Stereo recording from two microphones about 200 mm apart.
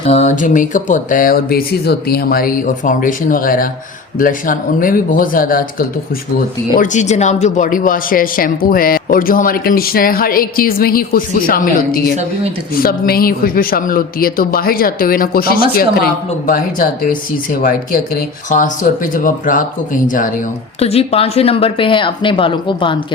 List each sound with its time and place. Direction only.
0.0 s speech: 30° left (ahead or behind)
6.7 s speech: 35° left (ahead or behind)
20.7 s speech: 30° left (ahead or behind)